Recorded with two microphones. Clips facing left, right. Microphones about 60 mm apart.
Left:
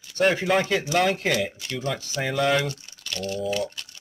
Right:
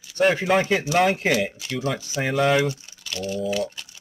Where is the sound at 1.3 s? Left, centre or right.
Centre.